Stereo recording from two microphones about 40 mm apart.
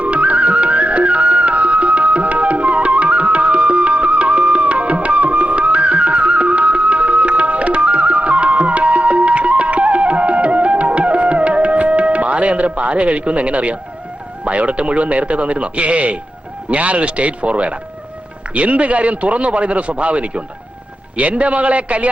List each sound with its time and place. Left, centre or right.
0.0 s music: right
14.4 s a man's voice: right